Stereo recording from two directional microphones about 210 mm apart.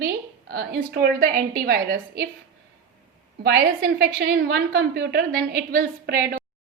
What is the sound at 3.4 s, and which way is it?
A woman's voice, 50° right (ahead or behind).